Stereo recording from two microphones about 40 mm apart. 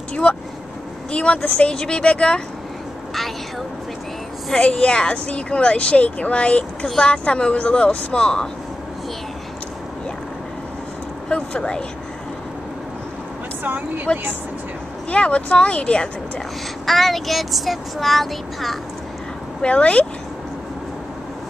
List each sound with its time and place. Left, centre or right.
0.1 s vehicle: left
1.1 s speech: left
1.7 s speech: left
4.6 s speech: left
11.2 s speech: left
13.7 s speech: right
15.0 s speech: left
16.8 s speech: centre
19.6 s speech: left